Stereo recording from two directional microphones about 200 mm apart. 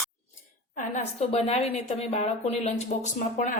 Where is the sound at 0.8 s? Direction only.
35° left (ahead or behind).